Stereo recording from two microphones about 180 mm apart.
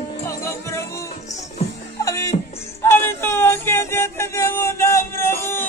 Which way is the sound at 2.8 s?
15° left (ahead or behind).